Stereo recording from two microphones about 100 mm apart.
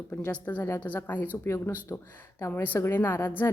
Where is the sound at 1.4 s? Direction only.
30° left (ahead or behind).